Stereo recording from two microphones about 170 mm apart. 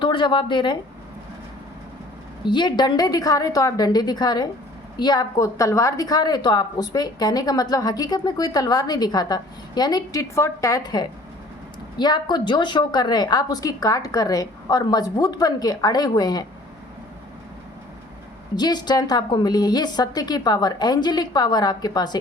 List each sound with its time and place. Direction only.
0.0 s speech: 30° left (ahead or behind)
2.4 s a woman's voice: 25° left (ahead or behind)
18.5 s a woman's voice: 25° left (ahead or behind)